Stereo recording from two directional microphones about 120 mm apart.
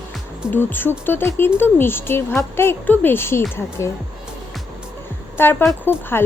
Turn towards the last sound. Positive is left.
turn(degrees=20)  # may be behind; listen again after turning